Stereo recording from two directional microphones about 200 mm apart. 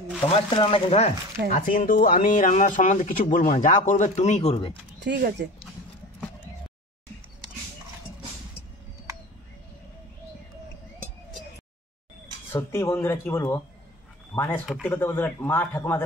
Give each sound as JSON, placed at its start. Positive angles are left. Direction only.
{"t": 0.3, "sound": "speech", "side_deg": 25}
{"t": 1.5, "sound": "speech", "side_deg": 45}
{"t": 5.0, "sound": "speech", "side_deg": -55}
{"t": 12.5, "sound": "speech", "side_deg": 15}